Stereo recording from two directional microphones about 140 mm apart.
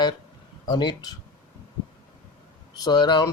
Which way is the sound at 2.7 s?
30° left (ahead or behind).